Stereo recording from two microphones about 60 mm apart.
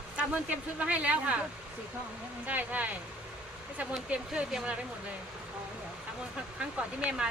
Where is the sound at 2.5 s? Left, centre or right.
Right.